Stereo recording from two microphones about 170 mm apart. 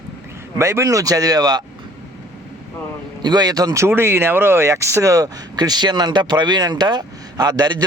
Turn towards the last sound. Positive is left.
turn(degrees=-25)  # may be behind; listen again after turning